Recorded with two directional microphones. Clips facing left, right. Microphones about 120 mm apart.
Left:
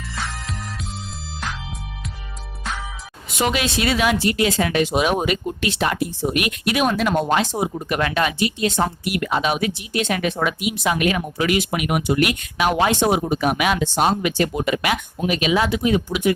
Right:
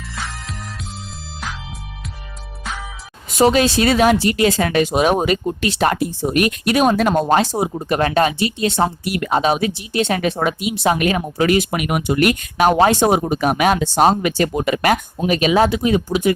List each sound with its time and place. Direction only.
3.3 s speech: 35° right (ahead or behind)